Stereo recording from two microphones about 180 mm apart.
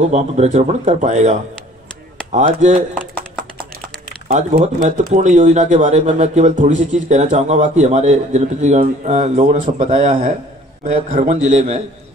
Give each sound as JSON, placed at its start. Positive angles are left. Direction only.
{"t": 0.1, "sound": "speech", "side_deg": -40}
{"t": 4.3, "sound": "speech", "side_deg": -40}